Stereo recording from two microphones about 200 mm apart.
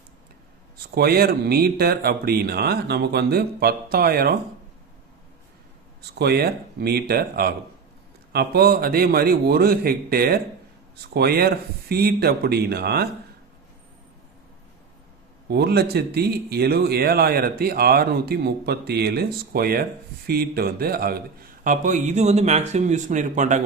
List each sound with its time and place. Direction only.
0.8 s speech: 50° right (ahead or behind)
6.1 s speech: 55° right (ahead or behind)
15.4 s a man's voice: 55° right (ahead or behind); by 23.6 s 40° right (ahead or behind)